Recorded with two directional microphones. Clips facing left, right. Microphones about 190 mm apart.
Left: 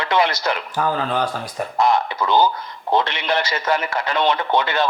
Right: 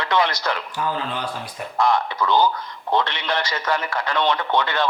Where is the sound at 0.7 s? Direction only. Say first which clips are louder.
Left 5 dB; 45° left (ahead or behind).